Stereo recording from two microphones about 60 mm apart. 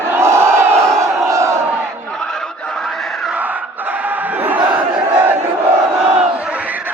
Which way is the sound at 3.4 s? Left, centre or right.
Right.